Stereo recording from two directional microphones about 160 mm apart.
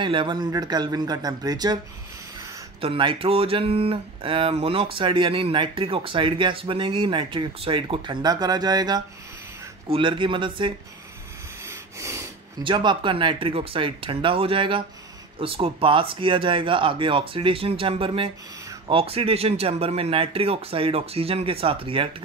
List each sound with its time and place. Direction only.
0.0 s speech: 30° right (ahead or behind)
2.8 s speech: 35° right (ahead or behind)
11.6 s wheeze: 15° right (ahead or behind)
12.6 s speech: 30° right (ahead or behind)